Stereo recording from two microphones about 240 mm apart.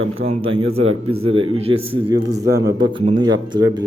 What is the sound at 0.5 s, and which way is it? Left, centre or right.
A man's voice, right.